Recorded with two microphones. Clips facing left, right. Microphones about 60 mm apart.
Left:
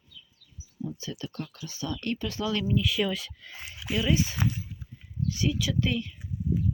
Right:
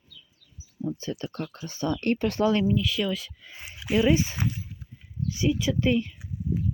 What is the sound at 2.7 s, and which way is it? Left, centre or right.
Speech, centre.